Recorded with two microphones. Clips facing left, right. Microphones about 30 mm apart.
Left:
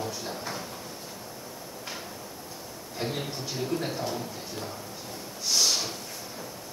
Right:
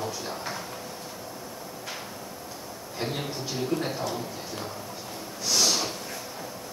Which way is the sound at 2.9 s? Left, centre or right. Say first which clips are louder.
Right 1 dB; centre.